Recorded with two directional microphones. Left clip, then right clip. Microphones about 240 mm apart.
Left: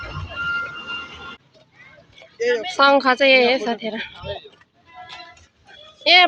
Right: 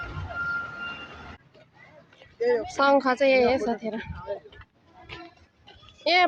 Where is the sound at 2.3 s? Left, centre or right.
Centre.